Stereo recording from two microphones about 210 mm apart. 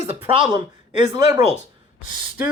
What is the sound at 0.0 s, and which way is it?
Speech, 25° right (ahead or behind).